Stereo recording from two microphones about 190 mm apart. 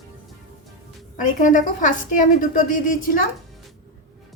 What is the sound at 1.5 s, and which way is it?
A woman's voice, 45° left (ahead or behind).